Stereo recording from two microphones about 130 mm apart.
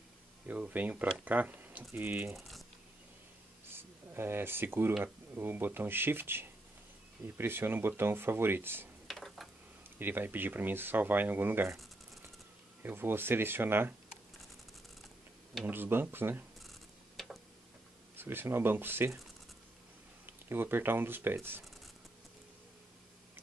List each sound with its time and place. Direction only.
0.5 s speech: 10° right (ahead or behind)
3.6 s a sound: 15° right (ahead or behind)
5.0 s speech: 15° right (ahead or behind)
9.0 s a sound: centre (ahead or behind)
9.9 s speech: 15° right (ahead or behind)
12.8 s speech: 15° right (ahead or behind)
15.6 s speech: 15° right (ahead or behind)
18.1 s speech: 15° right (ahead or behind)
20.4 s speech: 15° right (ahead or behind)